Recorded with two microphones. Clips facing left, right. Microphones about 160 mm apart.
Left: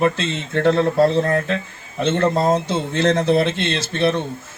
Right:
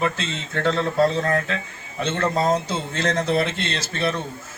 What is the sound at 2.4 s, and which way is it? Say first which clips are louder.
Speech: left 3 dB; 25° left (ahead or behind).